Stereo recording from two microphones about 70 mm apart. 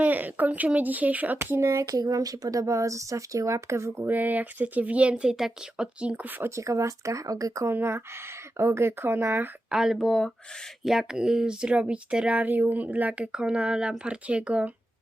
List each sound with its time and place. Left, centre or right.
0.0 s speech: right
4.1 s speech: right
6.6 s speech: right
7.7 s speech: right
9.6 s speech: centre
10.8 s speech: centre